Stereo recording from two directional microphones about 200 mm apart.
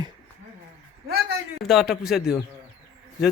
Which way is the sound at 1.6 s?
Centre (ahead or behind).